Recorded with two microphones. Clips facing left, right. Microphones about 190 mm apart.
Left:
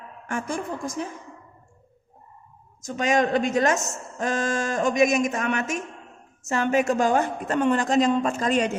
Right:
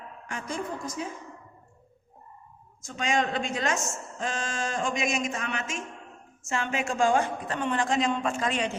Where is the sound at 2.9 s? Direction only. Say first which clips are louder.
Left 6 dB; 45° left (ahead or behind).